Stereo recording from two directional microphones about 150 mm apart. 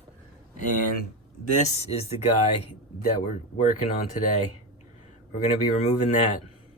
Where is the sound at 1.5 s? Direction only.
45° left (ahead or behind).